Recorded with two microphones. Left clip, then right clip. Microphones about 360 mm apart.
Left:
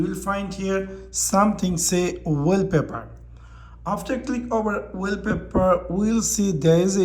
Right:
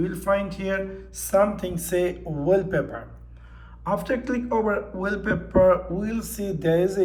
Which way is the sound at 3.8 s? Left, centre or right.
Centre.